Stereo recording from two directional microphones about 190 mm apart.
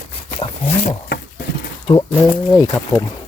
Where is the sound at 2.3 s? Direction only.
15° left (ahead or behind).